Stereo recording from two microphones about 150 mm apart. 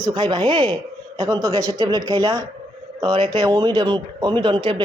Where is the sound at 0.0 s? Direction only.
30° right (ahead or behind).